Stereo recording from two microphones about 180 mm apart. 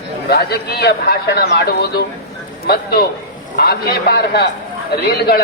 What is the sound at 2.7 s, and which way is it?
A man's voice, 60° left (ahead or behind).